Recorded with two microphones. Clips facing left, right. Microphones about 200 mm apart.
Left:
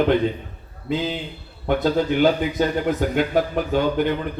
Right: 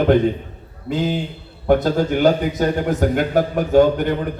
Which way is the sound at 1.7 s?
45° right (ahead or behind).